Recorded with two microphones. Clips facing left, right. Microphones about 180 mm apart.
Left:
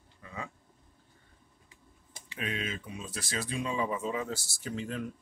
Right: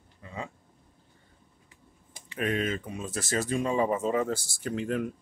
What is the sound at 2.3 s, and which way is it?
Speech, 50° right (ahead or behind).